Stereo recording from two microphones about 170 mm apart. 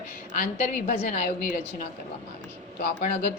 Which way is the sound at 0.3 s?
60° left (ahead or behind).